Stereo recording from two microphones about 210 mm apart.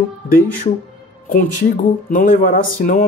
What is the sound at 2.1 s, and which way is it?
Speech, 40° left (ahead or behind).